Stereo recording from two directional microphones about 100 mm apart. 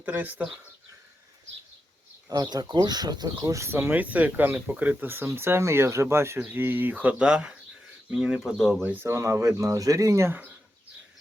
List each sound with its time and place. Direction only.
0.0 s speech: 20° right (ahead or behind)
2.3 s speech: 40° right (ahead or behind); by 10.5 s 20° right (ahead or behind)